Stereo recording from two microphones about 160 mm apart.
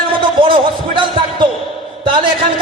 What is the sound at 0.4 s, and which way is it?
Basketball bounce, 30° right (ahead or behind).